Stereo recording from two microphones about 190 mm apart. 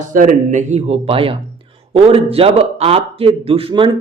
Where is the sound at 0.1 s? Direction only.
40° right (ahead or behind).